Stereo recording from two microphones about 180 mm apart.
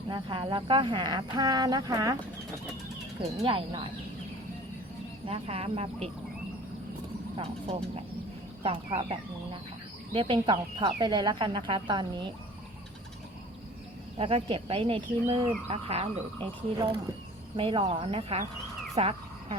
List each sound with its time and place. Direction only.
0.1 s speech: 25° right (ahead or behind)
3.4 s speech: 30° right (ahead or behind)
5.2 s speech: 35° right (ahead or behind)
8.6 s speech: 30° right (ahead or behind)
14.2 s speech: 30° right (ahead or behind)
18.9 s a sound: 30° right (ahead or behind)